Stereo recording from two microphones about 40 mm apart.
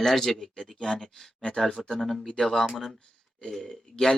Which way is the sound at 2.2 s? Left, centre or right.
Centre.